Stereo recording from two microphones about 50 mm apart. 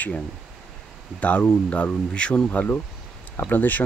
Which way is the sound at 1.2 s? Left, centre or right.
Left.